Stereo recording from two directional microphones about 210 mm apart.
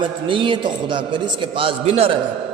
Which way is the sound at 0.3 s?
25° right (ahead or behind).